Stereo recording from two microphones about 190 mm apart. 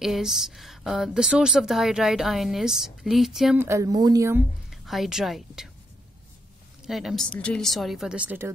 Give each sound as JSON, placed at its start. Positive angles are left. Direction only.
{"t": 0.0, "sound": "a woman's voice", "side_deg": 0}
{"t": 3.6, "sound": "a woman's voice", "side_deg": -15}
{"t": 4.6, "sound": "a woman's voice", "side_deg": 0}
{"t": 6.9, "sound": "a woman's voice", "side_deg": 0}